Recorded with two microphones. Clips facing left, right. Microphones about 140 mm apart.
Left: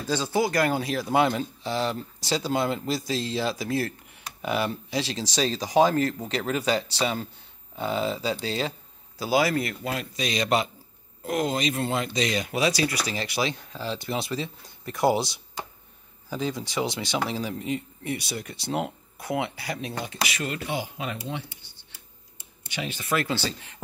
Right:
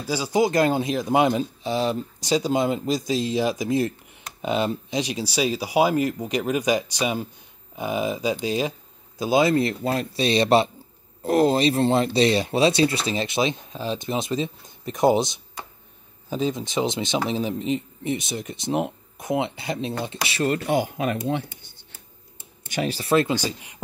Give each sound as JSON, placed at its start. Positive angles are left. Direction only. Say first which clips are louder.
{"t": 0.0, "sound": "speech", "louder": "right 3 dB", "side_deg": -10}
{"t": 20.4, "sound": "speech", "louder": "right 8 dB", "side_deg": -45}
{"t": 23.2, "sound": "speech", "louder": "right 4 dB", "side_deg": -15}